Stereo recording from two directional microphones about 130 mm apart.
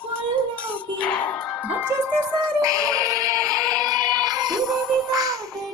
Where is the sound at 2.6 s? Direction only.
25° right (ahead or behind).